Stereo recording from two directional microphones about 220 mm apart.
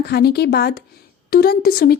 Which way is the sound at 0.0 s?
45° left (ahead or behind).